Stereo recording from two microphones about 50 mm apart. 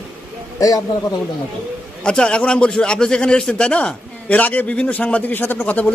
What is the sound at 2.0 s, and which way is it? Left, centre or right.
A man's voice, centre.